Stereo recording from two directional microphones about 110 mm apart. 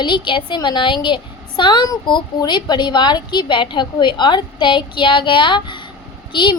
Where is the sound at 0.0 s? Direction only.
45° left (ahead or behind).